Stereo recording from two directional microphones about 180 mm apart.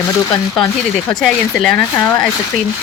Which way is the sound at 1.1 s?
Centre (ahead or behind).